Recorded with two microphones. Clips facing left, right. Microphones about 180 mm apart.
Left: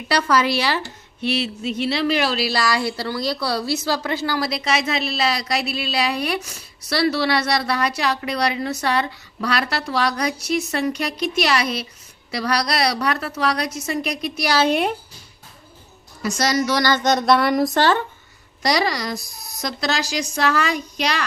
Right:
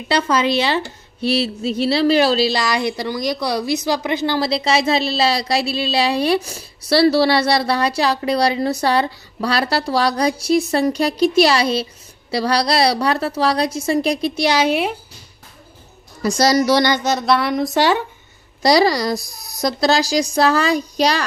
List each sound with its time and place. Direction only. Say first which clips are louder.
0.1 s a woman's voice: right 2 dB; 20° right (ahead or behind)
14.6 s speech: right 1 dB; 5° right (ahead or behind)
16.2 s a woman's voice: right 5 dB; 35° right (ahead or behind)
17.0 s speech: left 1 dB; 5° right (ahead or behind)
17.7 s speech: right 5 dB; 10° right (ahead or behind)
18.6 s a woman's voice: right 7 dB; 30° right (ahead or behind)